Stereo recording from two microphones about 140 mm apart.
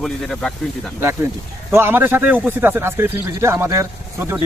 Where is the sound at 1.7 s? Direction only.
15° right (ahead or behind).